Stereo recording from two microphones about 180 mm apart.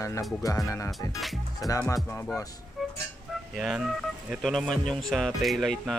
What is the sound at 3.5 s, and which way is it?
Speech, centre (ahead or behind).